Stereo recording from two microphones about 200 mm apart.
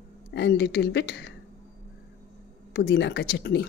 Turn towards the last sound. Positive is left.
turn(degrees=55)  # may be behind; listen again after turning